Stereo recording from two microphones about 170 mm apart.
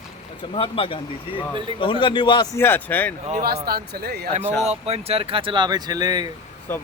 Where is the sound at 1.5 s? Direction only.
30° right (ahead or behind).